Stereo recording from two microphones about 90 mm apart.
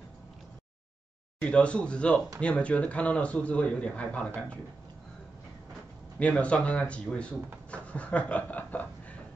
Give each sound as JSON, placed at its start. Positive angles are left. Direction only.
{"t": 1.4, "sound": "a man's voice", "side_deg": 10}
{"t": 6.1, "sound": "a man's voice", "side_deg": 15}